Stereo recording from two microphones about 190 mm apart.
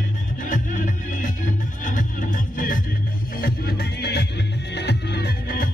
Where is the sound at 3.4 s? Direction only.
55° left (ahead or behind).